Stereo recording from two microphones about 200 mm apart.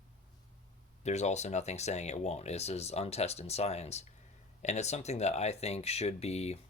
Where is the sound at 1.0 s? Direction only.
35° left (ahead or behind).